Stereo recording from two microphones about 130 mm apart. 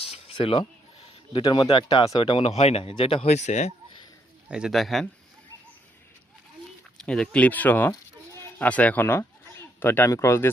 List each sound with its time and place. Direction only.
0.0 s a sound: 50° left (ahead or behind)
1.5 s speech: 45° left (ahead or behind)
2.5 s speech: 50° left (ahead or behind)
4.4 s a man's voice: 5° right (ahead or behind)
7.0 s speech: 5° left (ahead or behind)